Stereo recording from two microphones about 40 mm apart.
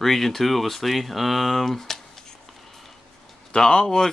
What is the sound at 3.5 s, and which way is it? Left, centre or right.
Speech, centre.